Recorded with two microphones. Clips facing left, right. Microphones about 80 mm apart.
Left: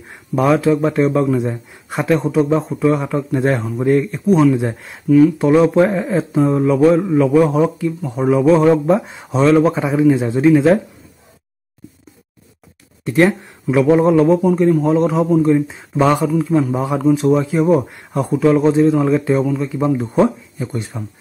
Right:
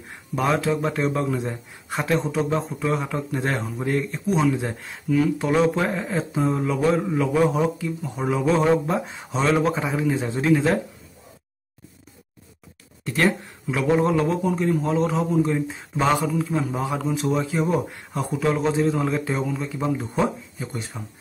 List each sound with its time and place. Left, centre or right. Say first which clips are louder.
0.4 s speech: left 8 dB; centre
13.0 s speech: left 8 dB; centre